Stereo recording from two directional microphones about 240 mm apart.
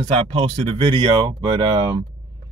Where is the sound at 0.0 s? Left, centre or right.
Right.